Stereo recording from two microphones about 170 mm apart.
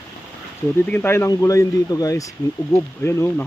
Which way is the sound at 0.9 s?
15° left (ahead or behind).